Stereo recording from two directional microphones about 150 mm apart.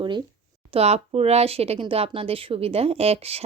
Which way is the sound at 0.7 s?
45° right (ahead or behind).